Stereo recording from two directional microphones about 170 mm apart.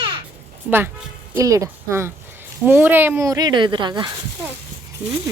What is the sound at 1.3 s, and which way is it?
Speech, 20° right (ahead or behind).